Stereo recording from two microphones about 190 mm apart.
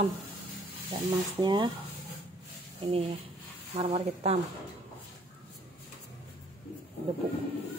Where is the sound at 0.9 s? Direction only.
25° right (ahead or behind).